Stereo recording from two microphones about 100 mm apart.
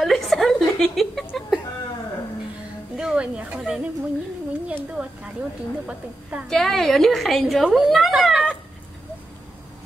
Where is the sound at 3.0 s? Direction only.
10° right (ahead or behind).